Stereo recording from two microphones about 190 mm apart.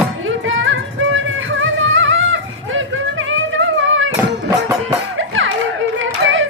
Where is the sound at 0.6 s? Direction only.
90° right.